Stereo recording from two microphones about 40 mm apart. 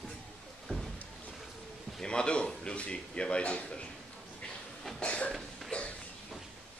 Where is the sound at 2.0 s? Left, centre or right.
Left.